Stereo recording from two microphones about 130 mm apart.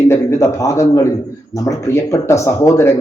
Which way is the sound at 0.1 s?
25° left (ahead or behind).